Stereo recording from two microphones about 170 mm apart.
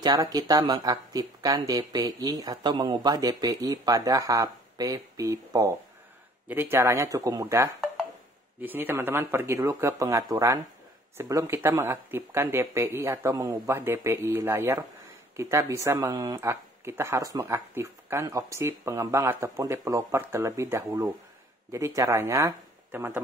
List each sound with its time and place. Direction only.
0.0 s speech: 25° right (ahead or behind)